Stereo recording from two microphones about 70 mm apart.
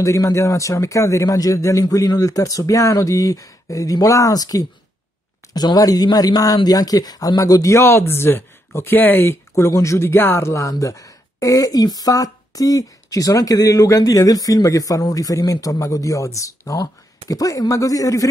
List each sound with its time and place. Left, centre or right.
0.0 s speech: left
7.8 s speech: left
9.7 s speech: left